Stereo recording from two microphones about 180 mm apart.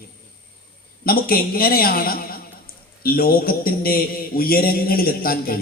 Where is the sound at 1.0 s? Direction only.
55° left (ahead or behind).